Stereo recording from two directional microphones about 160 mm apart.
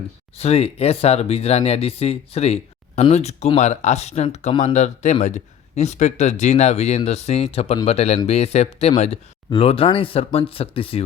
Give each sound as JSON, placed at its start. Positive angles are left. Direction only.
{"t": 0.3, "sound": "speech", "side_deg": 40}